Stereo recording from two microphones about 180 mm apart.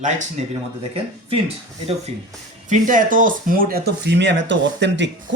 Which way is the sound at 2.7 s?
45° right (ahead or behind).